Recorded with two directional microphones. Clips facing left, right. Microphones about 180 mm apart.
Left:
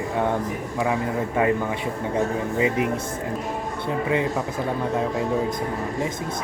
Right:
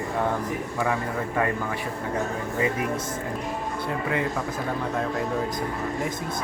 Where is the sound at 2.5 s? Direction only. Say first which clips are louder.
Left 3 dB; 15° left (ahead or behind).